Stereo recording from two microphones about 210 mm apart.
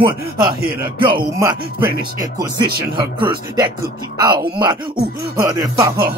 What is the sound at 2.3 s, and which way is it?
Speech, 20° right (ahead or behind).